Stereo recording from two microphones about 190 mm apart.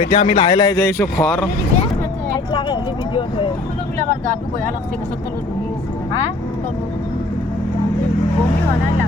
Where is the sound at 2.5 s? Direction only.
25° left (ahead or behind).